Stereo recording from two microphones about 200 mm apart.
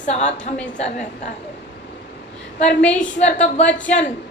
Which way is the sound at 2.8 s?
5° left (ahead or behind).